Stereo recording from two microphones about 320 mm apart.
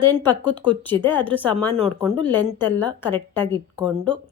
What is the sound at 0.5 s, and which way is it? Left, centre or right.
Speech, centre.